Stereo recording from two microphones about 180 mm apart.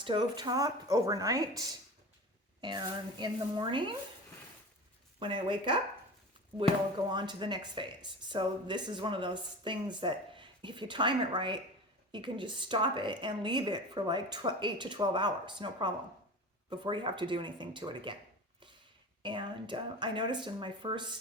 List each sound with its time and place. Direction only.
0.0 s a woman's voice: 25° right (ahead or behind)
5.2 s a woman's voice: 25° right (ahead or behind)
7.1 s a woman's voice: 25° right (ahead or behind)
19.2 s a woman's voice: 25° right (ahead or behind)